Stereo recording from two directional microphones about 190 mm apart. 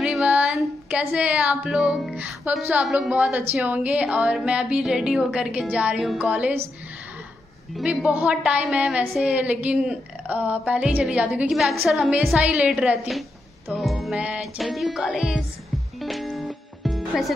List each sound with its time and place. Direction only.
0.0 s music: 5° right (ahead or behind)
3.5 s a woman's voice: 10° right (ahead or behind)
7.7 s a woman's voice: 5° right (ahead or behind)
16.0 s music: centre (ahead or behind)